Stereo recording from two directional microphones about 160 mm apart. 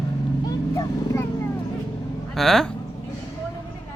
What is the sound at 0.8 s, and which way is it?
Vehicle, 20° left (ahead or behind).